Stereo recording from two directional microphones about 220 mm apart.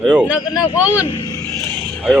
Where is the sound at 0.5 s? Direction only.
20° left (ahead or behind).